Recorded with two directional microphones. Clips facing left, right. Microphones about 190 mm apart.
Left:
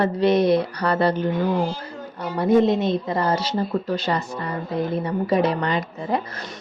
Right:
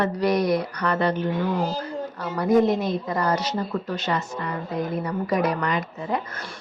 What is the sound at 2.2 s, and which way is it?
A woman's voice, 30° left (ahead or behind).